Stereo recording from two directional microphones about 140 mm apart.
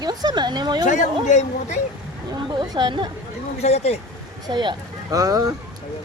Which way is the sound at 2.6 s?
30° right (ahead or behind).